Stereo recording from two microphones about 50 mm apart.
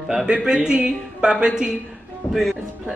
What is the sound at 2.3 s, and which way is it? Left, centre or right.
Music, centre.